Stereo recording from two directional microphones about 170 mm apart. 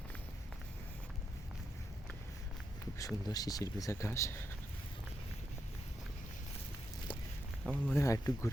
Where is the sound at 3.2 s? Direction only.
20° left (ahead or behind).